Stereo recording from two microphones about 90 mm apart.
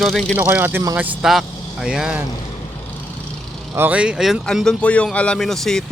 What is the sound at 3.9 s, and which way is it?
Speech, 15° right (ahead or behind).